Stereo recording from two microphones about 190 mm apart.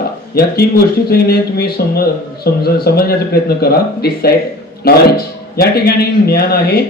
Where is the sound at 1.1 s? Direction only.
55° left (ahead or behind).